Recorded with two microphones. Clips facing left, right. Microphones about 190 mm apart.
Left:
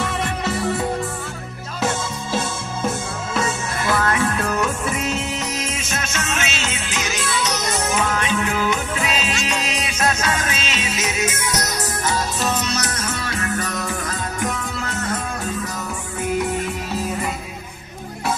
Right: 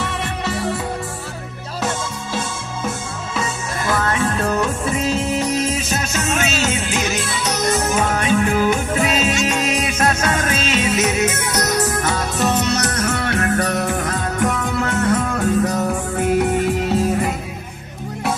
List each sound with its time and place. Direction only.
4.0 s music: 30° right (ahead or behind); by 16.3 s 55° right (ahead or behind)